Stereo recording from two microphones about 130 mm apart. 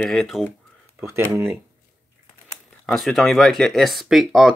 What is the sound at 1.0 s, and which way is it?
Speech, 20° right (ahead or behind).